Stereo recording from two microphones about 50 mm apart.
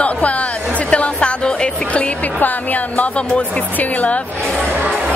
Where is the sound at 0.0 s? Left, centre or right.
Left.